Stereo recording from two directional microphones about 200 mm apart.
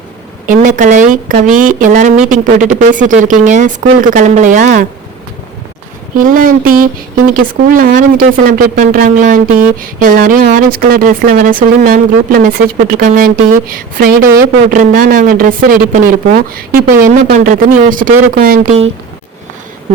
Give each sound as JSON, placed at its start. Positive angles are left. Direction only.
{"t": 0.4, "sound": "a woman's voice", "side_deg": -40}
{"t": 6.1, "sound": "speech", "side_deg": -45}